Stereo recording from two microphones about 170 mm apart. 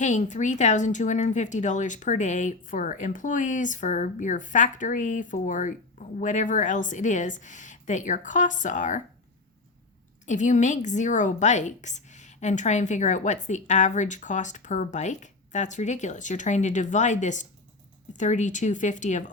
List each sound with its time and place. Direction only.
0.0 s a woman's voice: 45° left (ahead or behind)
10.2 s a woman's voice: 45° left (ahead or behind)